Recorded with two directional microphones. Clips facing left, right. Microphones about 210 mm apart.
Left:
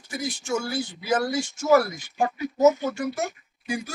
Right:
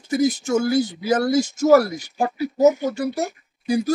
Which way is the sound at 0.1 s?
40° right (ahead or behind).